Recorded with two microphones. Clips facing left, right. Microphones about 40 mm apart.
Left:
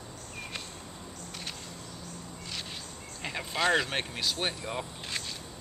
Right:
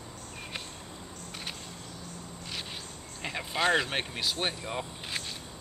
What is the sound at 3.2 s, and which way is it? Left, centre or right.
Speech, centre.